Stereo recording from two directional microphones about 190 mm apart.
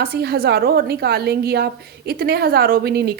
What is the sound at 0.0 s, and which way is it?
A woman's voice, 55° right (ahead or behind).